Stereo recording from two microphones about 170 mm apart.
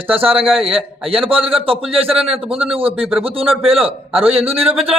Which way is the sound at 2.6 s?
35° right (ahead or behind).